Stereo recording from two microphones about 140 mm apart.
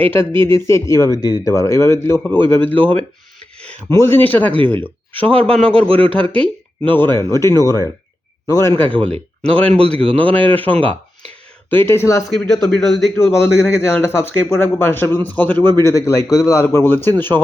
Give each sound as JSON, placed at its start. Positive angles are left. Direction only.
{"t": 0.1, "sound": "speech", "side_deg": 15}
{"t": 5.9, "sound": "speech", "side_deg": -40}
{"t": 6.8, "sound": "speech", "side_deg": 15}
{"t": 12.3, "sound": "a man's voice", "side_deg": 5}
{"t": 13.1, "sound": "speech", "side_deg": 20}